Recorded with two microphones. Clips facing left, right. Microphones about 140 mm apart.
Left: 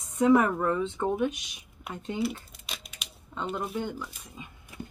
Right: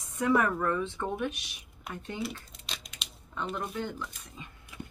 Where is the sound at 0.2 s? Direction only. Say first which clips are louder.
Left 5 dB; 20° left (ahead or behind).